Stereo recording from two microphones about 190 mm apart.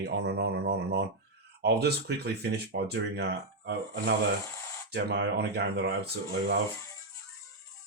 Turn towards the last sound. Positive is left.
turn(degrees=-60)  # may be behind; listen again after turning